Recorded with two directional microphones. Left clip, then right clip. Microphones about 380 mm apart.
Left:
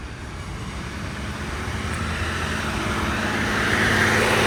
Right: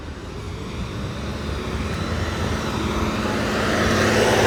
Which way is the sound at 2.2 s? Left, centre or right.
Centre.